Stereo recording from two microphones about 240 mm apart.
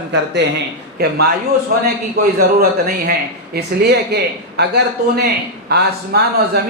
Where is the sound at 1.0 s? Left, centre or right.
Right.